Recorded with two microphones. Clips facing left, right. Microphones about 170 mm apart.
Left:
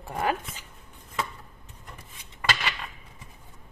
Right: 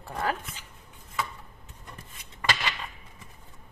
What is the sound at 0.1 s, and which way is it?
Speech, 20° left (ahead or behind).